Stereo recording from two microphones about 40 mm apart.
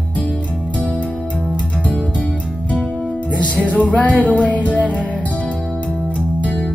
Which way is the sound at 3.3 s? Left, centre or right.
Left.